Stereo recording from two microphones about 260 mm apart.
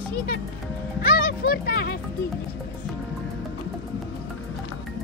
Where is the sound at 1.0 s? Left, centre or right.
Left.